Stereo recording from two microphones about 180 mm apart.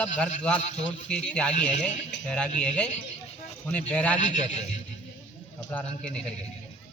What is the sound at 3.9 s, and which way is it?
Speech, 5° left (ahead or behind).